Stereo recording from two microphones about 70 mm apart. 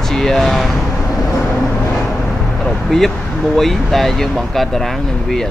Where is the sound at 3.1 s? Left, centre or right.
Centre.